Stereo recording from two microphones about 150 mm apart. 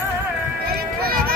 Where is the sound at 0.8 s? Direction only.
80° right.